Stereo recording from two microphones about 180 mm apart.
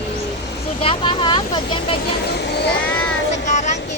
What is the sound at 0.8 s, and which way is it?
Speech, 30° left (ahead or behind).